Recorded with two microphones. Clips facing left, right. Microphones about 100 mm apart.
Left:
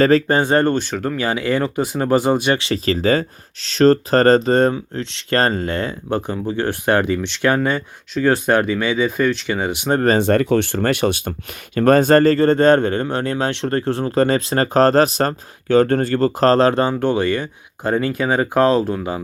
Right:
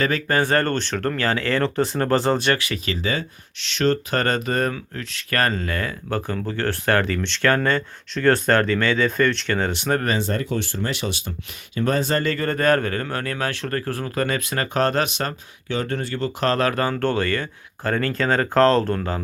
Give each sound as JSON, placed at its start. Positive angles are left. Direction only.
{"t": 0.3, "sound": "speech", "side_deg": 20}
{"t": 2.6, "sound": "speech", "side_deg": 30}
{"t": 9.9, "sound": "speech", "side_deg": 30}
{"t": 10.2, "sound": "speech", "side_deg": 60}